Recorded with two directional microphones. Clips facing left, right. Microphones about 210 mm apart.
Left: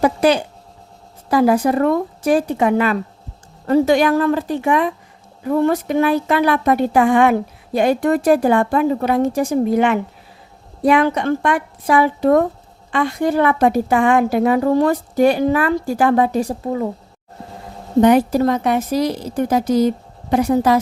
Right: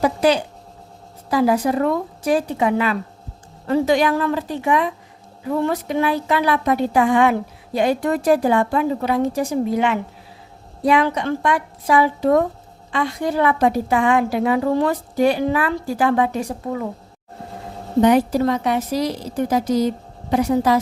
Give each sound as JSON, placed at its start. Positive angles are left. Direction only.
{"t": 0.0, "sound": "a woman's voice", "side_deg": 55}
{"t": 18.0, "sound": "a woman's voice", "side_deg": 50}